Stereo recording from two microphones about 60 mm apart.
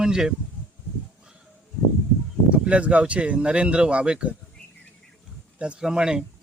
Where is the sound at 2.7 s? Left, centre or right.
Right.